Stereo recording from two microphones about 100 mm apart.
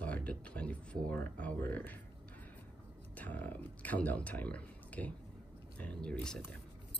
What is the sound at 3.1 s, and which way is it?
Speech, 15° left (ahead or behind).